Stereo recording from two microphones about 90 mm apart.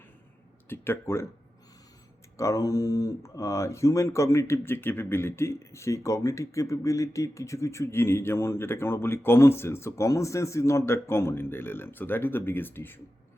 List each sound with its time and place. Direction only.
0.7 s speech: 30° left (ahead or behind)
2.4 s speech: 35° left (ahead or behind)